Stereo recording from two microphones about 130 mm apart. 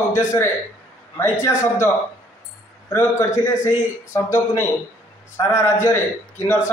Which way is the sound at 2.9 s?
20° left (ahead or behind).